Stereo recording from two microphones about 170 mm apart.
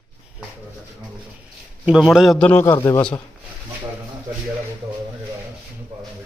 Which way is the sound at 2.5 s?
15° left (ahead or behind).